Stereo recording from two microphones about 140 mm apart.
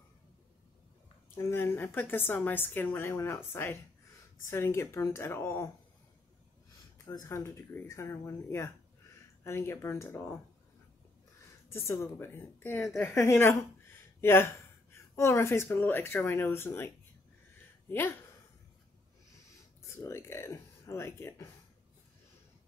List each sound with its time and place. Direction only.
1.3 s a woman's voice: 15° left (ahead or behind)
7.1 s speech: 20° left (ahead or behind)
11.7 s a woman's voice: 20° left (ahead or behind)
19.8 s speech: 20° left (ahead or behind)